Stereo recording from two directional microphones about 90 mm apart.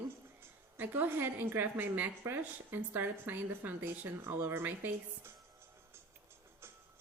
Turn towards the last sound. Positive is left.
turn(degrees=-25)  # may be behind; listen again after turning